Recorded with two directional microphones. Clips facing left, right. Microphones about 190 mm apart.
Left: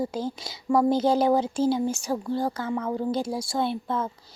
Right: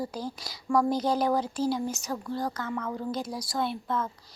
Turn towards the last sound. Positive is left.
turn(degrees=30)  # may be behind; listen again after turning